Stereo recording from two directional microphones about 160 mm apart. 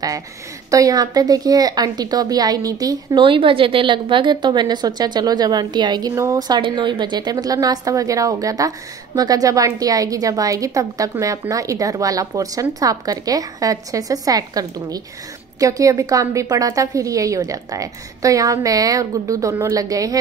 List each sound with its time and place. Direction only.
0.7 s a woman's voice: 20° right (ahead or behind)